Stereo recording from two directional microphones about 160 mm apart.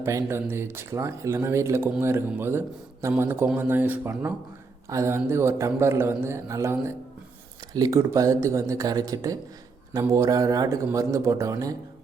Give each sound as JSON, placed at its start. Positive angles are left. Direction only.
{"t": 0.0, "sound": "a man's voice", "side_deg": -20}